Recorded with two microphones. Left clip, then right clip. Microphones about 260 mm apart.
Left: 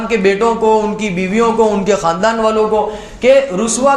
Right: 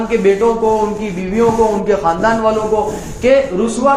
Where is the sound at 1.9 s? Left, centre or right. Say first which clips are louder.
Even; left.